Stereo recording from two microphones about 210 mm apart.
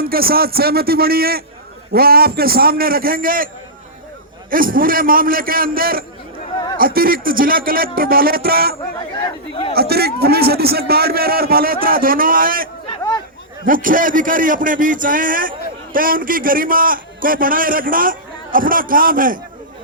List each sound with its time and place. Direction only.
0.0 s a man's voice: 45° right (ahead or behind)
4.5 s a man's voice: 40° right (ahead or behind)
9.7 s a man's voice: 50° right (ahead or behind)
13.7 s a man's voice: 40° right (ahead or behind)